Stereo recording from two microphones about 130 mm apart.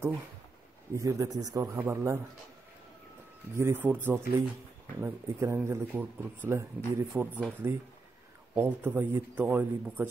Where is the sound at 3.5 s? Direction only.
20° right (ahead or behind).